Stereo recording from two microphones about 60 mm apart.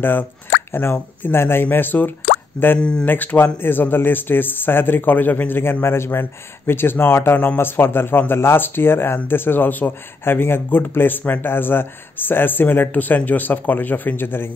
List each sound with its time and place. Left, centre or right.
0.9 s speech: left
2.8 s speech: centre
3.1 s speech: left